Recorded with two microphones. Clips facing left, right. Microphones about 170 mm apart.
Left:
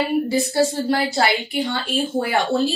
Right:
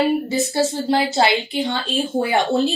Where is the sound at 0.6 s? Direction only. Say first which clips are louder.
Right 1 dB; 20° right (ahead or behind).